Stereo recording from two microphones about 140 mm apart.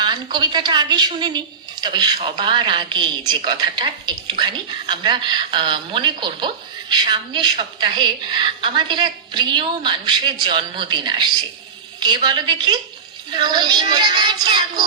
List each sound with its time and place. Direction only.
0.0 s a woman's voice: 30° right (ahead or behind)